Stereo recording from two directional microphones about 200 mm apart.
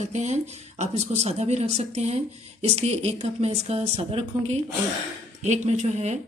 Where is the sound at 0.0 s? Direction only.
35° right (ahead or behind).